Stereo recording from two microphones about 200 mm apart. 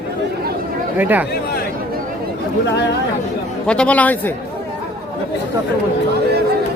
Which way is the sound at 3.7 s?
5° left (ahead or behind).